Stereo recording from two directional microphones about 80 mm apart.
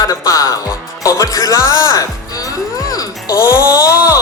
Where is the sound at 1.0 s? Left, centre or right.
Left.